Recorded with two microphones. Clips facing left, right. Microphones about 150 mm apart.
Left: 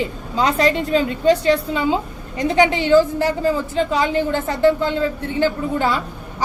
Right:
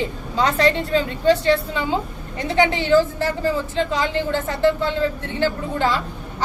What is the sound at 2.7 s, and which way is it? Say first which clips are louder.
A woman's voice: left 3 dB; 15° left (ahead or behind).